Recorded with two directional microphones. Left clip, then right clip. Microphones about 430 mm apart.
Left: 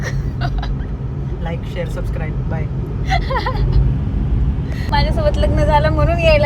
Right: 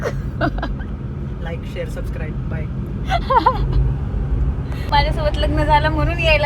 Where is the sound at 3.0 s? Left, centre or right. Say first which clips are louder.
Right 5 dB; centre.